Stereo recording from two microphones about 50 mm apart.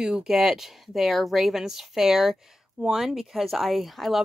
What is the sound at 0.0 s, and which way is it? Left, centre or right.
Speech, centre.